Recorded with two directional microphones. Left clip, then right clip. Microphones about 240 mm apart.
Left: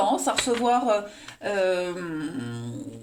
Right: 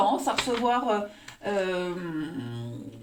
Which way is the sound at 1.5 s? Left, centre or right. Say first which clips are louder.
Left 4 dB; left.